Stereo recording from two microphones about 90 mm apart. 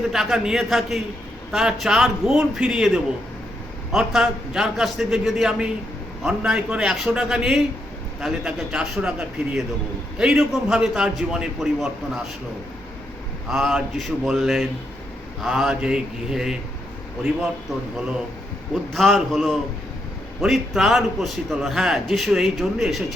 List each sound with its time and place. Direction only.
0.1 s a man's voice: 5° right (ahead or behind)
13.5 s a man's voice: centre (ahead or behind)
18.7 s a man's voice: 5° left (ahead or behind)